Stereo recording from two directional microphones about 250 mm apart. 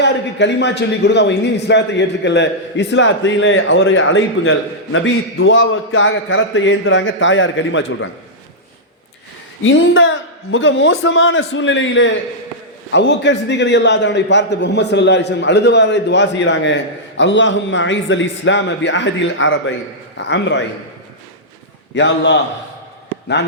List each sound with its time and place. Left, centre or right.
0.0 s a man's voice: left
9.6 s a man's voice: left
21.9 s a man's voice: left